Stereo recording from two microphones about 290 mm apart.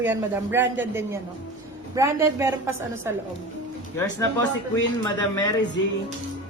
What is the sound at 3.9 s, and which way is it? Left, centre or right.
Speech, centre.